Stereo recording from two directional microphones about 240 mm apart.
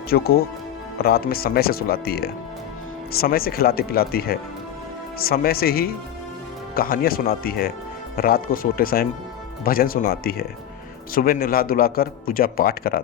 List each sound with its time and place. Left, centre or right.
0.1 s a man's voice: left